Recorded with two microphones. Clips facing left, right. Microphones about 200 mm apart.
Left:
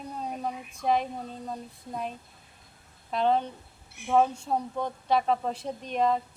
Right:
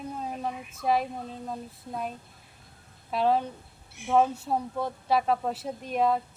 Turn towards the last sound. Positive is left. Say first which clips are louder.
# right 1 dB
turn(degrees=-5)  # may be behind; listen again after turning